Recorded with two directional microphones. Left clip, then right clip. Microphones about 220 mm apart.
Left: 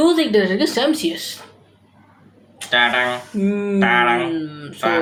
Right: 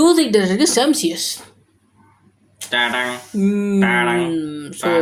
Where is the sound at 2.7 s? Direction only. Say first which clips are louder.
Left 3 dB; 20° right (ahead or behind).